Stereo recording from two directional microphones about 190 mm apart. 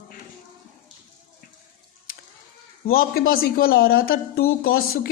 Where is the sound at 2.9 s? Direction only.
50° left (ahead or behind).